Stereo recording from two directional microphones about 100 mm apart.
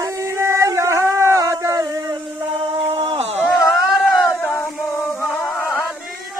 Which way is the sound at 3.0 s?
75° right (ahead or behind).